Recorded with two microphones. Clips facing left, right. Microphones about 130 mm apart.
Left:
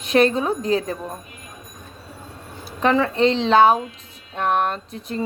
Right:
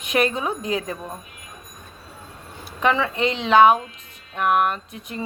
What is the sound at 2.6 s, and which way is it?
Speech, 35° left (ahead or behind).